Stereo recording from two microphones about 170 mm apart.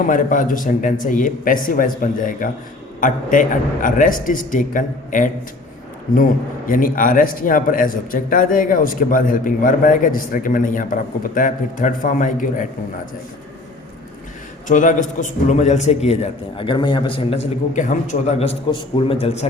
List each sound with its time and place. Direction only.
0.1 s a man's voice: 50° left (ahead or behind)
6.7 s a man's voice: 55° left (ahead or behind)
14.7 s a man's voice: 50° left (ahead or behind)